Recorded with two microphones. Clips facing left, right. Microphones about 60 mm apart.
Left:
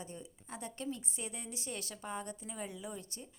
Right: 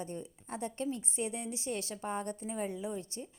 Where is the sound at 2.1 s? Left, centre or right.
Right.